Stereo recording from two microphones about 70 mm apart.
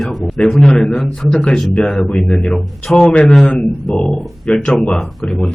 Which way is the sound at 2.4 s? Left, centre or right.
Centre.